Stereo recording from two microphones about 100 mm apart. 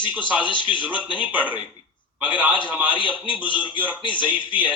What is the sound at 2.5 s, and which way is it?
Speech, 55° left (ahead or behind).